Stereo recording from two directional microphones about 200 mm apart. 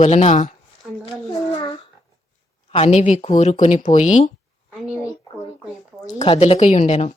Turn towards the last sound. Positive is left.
turn(degrees=30)  # may be behind; listen again after turning